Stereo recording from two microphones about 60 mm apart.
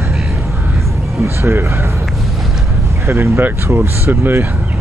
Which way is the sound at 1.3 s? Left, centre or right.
Right.